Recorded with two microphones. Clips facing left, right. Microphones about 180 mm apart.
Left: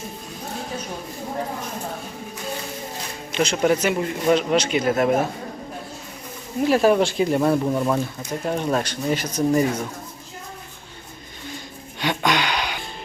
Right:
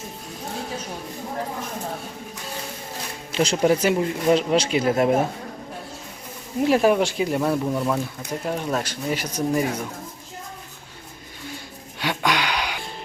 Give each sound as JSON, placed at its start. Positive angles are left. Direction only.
{"t": 3.3, "sound": "speech", "side_deg": -30}
{"t": 6.6, "sound": "speech", "side_deg": -20}
{"t": 6.9, "sound": "speech", "side_deg": -10}
{"t": 7.4, "sound": "speech", "side_deg": 10}
{"t": 8.3, "sound": "speech", "side_deg": -5}
{"t": 11.9, "sound": "music", "side_deg": -5}